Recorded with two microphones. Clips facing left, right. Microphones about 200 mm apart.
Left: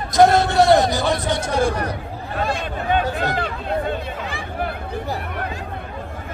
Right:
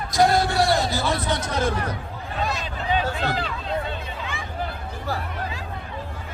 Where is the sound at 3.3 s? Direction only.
55° left (ahead or behind).